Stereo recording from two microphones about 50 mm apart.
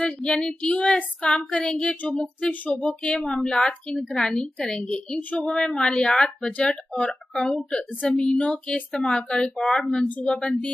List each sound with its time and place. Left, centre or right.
0.0 s child singing: left
3.2 s speech: centre
6.9 s child singing: left
7.4 s speech: centre
8.4 s child singing: left
9.1 s speech: centre